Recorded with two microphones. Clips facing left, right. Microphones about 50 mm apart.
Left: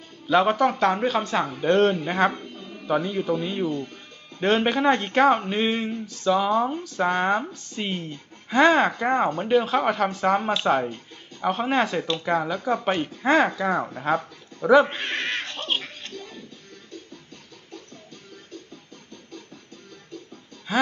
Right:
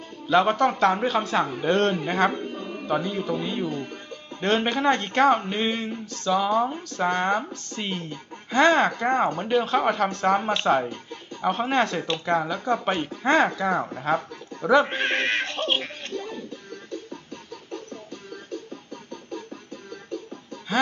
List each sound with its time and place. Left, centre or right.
0.3 s speech: centre
2.4 s a sound: right
2.8 s speech: centre
14.8 s dog: right
16.1 s music: right
20.7 s a sound: centre